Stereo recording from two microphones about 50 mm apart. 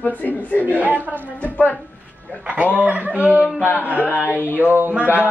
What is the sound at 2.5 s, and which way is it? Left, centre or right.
A man's voice, right.